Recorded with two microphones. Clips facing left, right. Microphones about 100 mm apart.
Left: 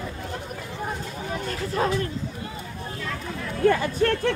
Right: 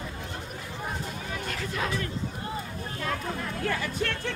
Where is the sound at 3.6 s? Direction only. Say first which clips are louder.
Left 11 dB; 40° left (ahead or behind).